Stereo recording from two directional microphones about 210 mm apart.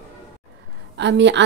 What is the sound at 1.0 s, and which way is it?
Speech, 60° right (ahead or behind).